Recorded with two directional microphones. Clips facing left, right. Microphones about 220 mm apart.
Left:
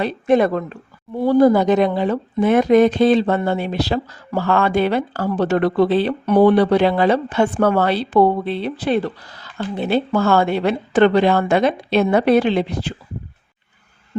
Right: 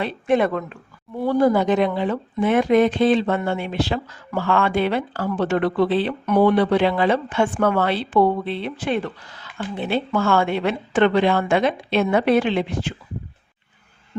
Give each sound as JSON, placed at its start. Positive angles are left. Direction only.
{"t": 0.0, "sound": "speech", "side_deg": 40}